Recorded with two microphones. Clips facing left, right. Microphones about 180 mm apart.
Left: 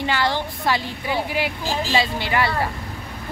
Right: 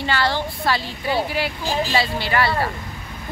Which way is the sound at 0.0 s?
15° left (ahead or behind).